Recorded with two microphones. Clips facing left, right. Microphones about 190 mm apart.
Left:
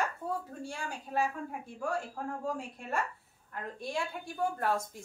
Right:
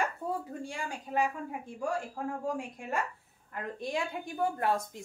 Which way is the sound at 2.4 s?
15° right (ahead or behind).